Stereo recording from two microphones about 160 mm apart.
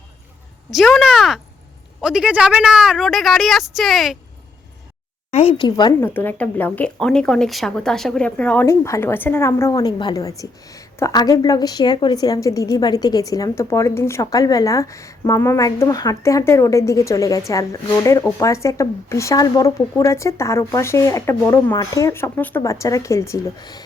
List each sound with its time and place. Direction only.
0.7 s a woman's voice: centre (ahead or behind)
5.3 s speech: 40° left (ahead or behind)
6.0 s speech: 10° left (ahead or behind)